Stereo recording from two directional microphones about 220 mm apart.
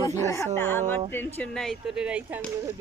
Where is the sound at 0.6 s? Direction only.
10° left (ahead or behind).